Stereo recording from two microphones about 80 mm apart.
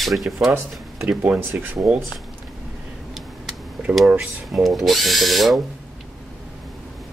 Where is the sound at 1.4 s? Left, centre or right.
Right.